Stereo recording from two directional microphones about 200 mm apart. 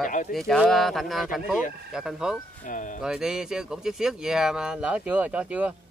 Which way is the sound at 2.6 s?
40° left (ahead or behind).